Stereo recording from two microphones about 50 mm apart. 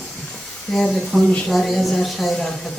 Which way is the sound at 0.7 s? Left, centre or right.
Centre.